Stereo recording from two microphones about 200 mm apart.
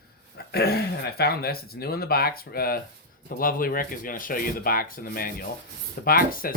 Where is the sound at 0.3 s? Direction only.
50° left (ahead or behind).